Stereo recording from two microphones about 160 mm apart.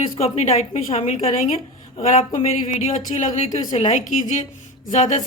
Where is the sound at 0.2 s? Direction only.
40° left (ahead or behind).